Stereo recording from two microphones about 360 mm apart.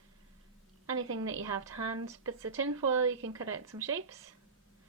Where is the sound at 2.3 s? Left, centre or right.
Right.